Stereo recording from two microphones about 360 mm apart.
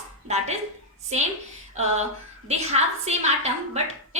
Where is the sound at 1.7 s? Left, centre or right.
Centre.